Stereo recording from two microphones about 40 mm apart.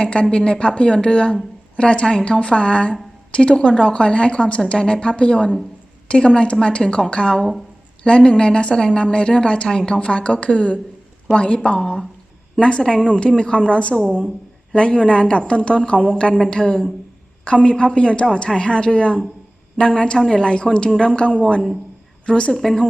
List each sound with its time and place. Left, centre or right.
0.0 s a woman's voice: left
12.8 s speech: centre
13.1 s a woman's voice: left
22.3 s a woman's voice: left
22.5 s speech: centre